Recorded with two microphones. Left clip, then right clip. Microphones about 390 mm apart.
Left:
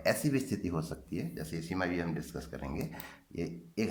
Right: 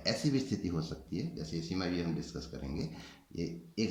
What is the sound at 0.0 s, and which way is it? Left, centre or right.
Speech, centre.